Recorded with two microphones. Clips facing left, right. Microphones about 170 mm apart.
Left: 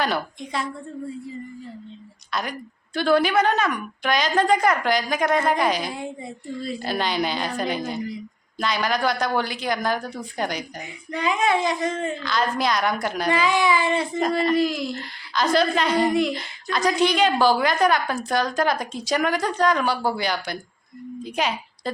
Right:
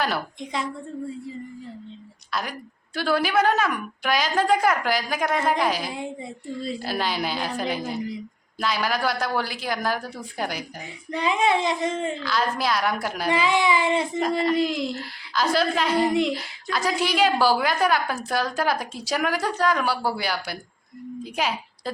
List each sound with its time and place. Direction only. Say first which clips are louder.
2.3 s a woman's voice: left 2 dB; centre (ahead or behind)
11.1 s speech: even; 30° right (ahead or behind)
12.2 s a woman's voice: left 3 dB; 5° right (ahead or behind)
13.3 s speech: even; 25° right (ahead or behind)
14.9 s a woman's voice: left 1 dB; 5° right (ahead or behind)